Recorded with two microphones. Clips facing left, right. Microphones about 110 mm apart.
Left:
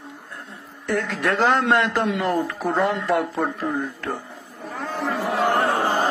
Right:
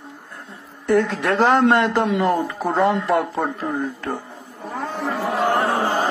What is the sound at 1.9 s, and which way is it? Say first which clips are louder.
Speech: right 3 dB; 5° right (ahead or behind).